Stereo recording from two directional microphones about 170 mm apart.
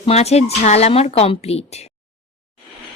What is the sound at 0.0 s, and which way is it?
A woman's voice, 35° left (ahead or behind).